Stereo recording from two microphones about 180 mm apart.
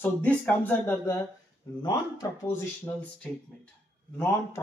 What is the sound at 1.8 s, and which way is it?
Speech, 25° left (ahead or behind).